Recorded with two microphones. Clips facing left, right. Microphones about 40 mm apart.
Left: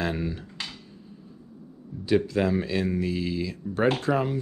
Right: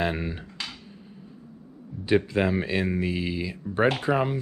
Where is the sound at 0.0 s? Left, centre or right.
Right.